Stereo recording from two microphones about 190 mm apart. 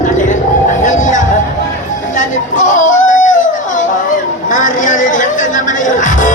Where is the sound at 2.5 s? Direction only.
40° left (ahead or behind).